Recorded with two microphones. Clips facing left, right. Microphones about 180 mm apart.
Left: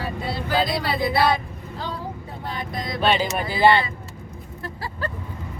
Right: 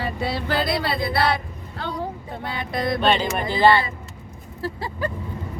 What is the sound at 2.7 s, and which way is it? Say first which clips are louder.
Speech: right 10 dB; 65° right (ahead or behind).